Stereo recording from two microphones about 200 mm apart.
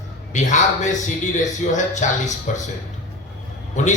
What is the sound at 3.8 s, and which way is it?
Speech, 35° left (ahead or behind).